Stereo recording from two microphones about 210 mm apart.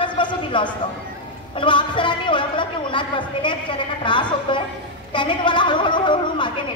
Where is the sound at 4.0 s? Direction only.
20° left (ahead or behind).